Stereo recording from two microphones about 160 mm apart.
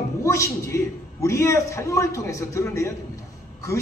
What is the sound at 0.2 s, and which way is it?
A man's voice, 20° left (ahead or behind).